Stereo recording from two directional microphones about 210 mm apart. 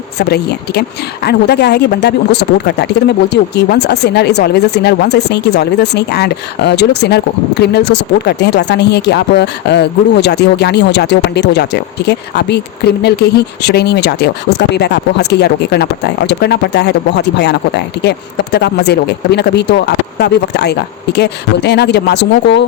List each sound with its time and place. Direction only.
0.2 s speech: 50° left (ahead or behind)